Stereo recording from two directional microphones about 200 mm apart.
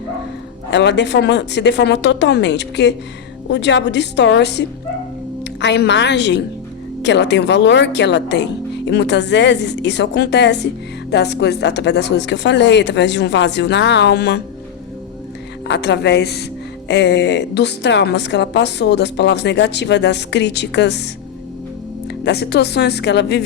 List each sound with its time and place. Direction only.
0.7 s a woman's voice: 60° left (ahead or behind)
15.6 s a woman's voice: 60° left (ahead or behind)
22.0 s a woman's voice: 55° left (ahead or behind)